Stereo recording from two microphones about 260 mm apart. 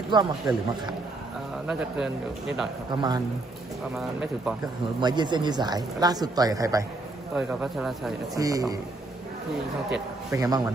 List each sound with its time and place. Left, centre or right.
0.1 s speech: centre
2.9 s speech: centre
3.9 s speech: centre
4.9 s speech: centre
7.3 s speech: centre
8.4 s speech: centre
9.9 s a man's voice: centre